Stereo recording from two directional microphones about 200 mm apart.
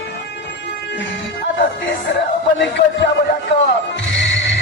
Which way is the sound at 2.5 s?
60° left (ahead or behind).